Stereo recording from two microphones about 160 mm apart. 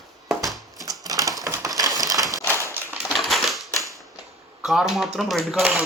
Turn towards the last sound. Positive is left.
turn(degrees=0)  # may be behind; listen again after turning